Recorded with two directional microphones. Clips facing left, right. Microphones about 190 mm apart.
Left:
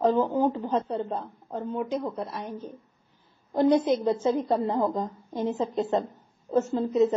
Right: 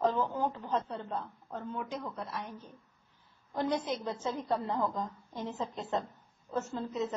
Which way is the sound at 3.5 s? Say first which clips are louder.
Left 11 dB; 15° left (ahead or behind).